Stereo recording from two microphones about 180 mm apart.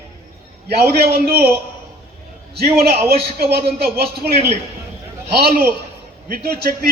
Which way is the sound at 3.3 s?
60° right (ahead or behind).